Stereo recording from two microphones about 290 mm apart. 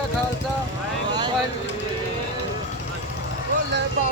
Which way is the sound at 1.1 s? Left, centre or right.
Centre.